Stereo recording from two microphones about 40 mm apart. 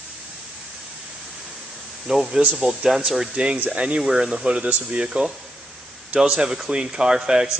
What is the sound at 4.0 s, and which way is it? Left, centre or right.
Speech, centre.